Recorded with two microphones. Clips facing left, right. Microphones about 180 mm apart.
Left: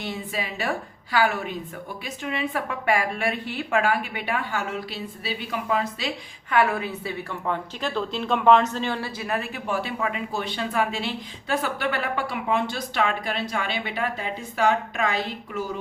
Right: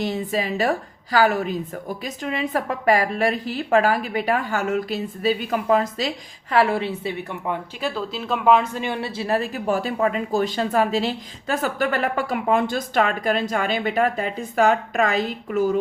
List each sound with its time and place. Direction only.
0.0 s a woman's voice: 40° right (ahead or behind)
6.5 s a woman's voice: 30° right (ahead or behind); by 15.1 s 45° right (ahead or behind)